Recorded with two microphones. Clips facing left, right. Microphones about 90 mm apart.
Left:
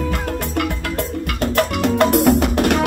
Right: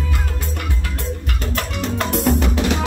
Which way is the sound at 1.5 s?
55° left (ahead or behind).